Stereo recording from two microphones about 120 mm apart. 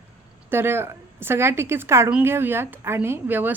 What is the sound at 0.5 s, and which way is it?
A woman's voice, 20° right (ahead or behind).